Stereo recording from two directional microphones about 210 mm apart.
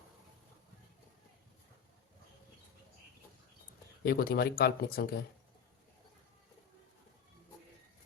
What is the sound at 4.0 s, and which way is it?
Speech, 45° left (ahead or behind).